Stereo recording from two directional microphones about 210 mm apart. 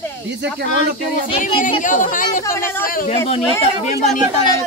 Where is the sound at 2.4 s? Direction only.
15° left (ahead or behind).